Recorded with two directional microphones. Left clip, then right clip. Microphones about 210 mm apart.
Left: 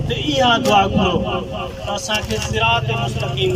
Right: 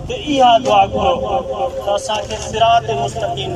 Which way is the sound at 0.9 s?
30° right (ahead or behind).